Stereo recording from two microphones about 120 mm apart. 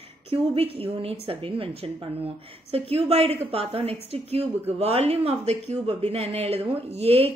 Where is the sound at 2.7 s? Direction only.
55° right (ahead or behind).